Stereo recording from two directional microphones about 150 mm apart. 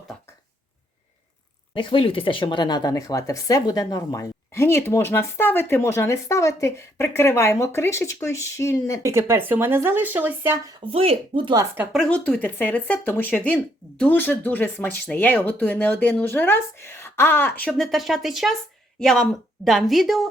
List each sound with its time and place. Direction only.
1.7 s speech: 35° left (ahead or behind); by 9.0 s 20° left (ahead or behind)
9.0 s speech: 15° right (ahead or behind)
10.9 s speech: 40° right (ahead or behind)
11.9 s a woman's voice: 5° left (ahead or behind)